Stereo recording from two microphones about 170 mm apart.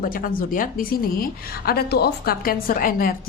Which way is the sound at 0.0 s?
55° left (ahead or behind).